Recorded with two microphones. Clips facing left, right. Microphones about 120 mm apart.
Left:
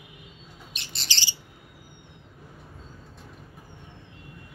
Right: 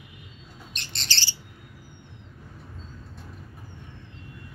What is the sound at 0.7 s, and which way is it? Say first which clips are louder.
Bird: right 2 dB; 5° left (ahead or behind).